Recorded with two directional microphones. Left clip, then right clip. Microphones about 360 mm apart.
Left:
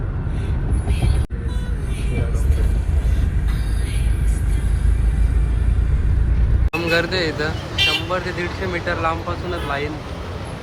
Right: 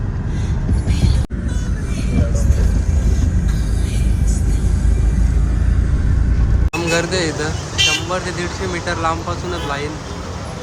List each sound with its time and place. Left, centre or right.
6.7 s speech: centre